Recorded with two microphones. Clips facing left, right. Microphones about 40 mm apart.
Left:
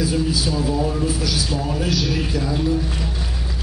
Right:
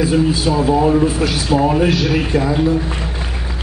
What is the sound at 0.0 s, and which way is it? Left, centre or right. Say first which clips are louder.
A man's voice: right 6 dB; right.